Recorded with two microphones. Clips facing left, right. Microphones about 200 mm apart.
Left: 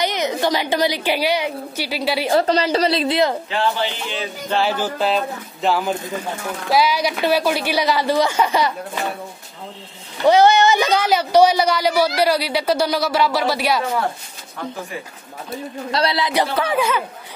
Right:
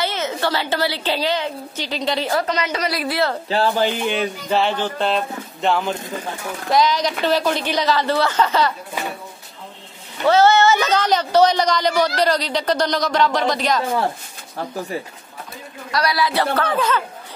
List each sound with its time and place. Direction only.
0.0 s a woman's voice: 15° left (ahead or behind)
2.3 s a woman's voice: 30° left (ahead or behind)
3.4 s speech: 35° right (ahead or behind); by 4.3 s 55° right (ahead or behind)
4.5 s a woman's voice: 5° left (ahead or behind)
10.2 s a woman's voice: 15° left (ahead or behind)
15.9 s a woman's voice: 25° left (ahead or behind)